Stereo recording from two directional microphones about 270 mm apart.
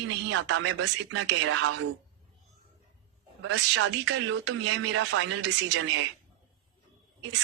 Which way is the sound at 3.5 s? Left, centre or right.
Right.